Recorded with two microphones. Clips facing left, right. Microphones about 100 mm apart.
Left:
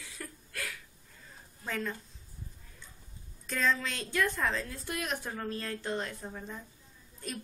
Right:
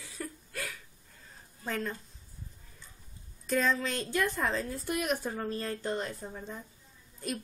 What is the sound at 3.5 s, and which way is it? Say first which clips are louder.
A woman's voice: right 2 dB; 10° right (ahead or behind).